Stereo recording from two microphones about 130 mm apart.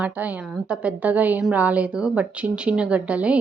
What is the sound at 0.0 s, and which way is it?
A woman's voice, 10° right (ahead or behind).